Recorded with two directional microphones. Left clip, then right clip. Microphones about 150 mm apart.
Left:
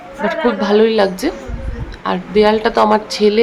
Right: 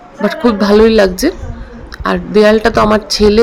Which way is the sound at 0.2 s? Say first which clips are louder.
Right 3 dB; 35° right (ahead or behind).